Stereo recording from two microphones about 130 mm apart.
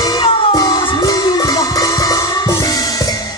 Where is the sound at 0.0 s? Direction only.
30° left (ahead or behind).